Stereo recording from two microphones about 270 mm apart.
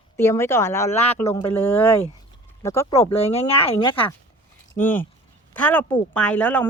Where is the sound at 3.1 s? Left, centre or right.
Left.